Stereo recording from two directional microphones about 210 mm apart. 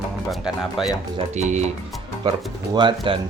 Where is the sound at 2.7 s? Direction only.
20° right (ahead or behind).